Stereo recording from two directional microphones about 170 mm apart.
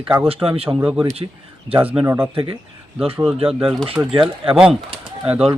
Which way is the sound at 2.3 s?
30° right (ahead or behind).